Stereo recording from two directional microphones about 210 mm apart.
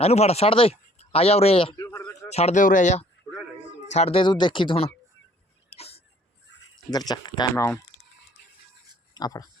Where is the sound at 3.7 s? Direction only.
60° left (ahead or behind).